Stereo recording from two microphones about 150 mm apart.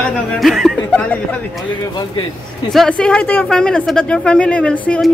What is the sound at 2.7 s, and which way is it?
Speech, 5° left (ahead or behind).